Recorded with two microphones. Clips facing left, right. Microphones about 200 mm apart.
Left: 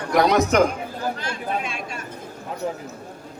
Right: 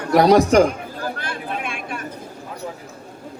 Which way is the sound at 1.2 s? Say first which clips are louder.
Left 1 dB; 55° right (ahead or behind).